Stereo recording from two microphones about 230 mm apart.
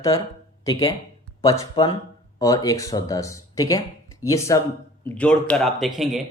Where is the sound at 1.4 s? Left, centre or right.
Centre.